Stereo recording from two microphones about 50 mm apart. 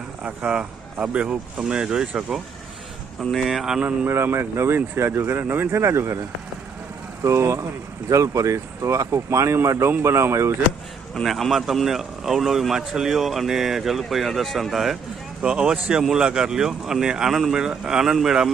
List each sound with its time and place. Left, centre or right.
0.2 s speech: right
4.0 s speech: right
5.7 s speech: right
7.3 s speech: right
8.1 s speech: right
9.6 s speech: right
11.1 s speech: centre
15.4 s speech: centre